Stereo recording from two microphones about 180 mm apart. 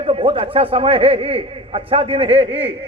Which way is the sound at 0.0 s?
30° right (ahead or behind).